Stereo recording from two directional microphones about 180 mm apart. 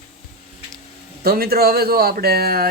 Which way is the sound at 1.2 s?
55° right (ahead or behind).